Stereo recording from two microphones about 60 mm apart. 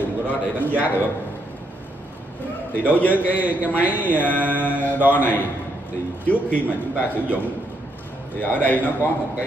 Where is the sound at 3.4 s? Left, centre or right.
Right.